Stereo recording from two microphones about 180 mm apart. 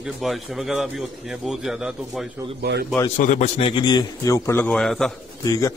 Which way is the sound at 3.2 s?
45° left (ahead or behind).